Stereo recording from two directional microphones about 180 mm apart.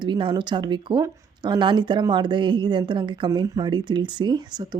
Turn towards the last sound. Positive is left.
turn(degrees=-25)  # may be behind; listen again after turning